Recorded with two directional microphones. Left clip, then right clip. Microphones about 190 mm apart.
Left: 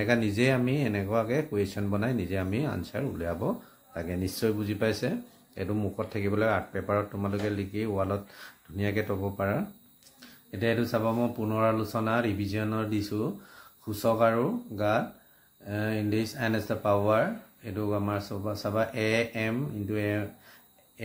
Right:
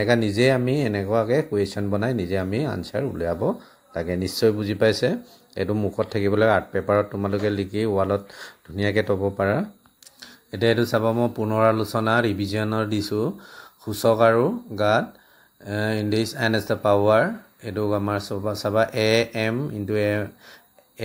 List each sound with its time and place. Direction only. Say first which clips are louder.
0.0 s speech: right 7 dB; 30° right (ahead or behind)